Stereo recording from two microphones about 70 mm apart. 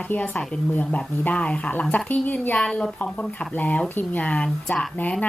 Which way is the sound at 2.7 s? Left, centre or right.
Centre.